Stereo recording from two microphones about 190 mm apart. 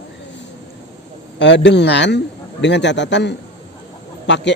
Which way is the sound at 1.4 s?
70° left (ahead or behind).